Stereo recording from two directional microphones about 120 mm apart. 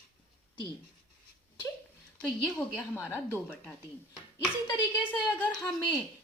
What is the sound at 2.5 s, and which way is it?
A woman's voice, 10° left (ahead or behind).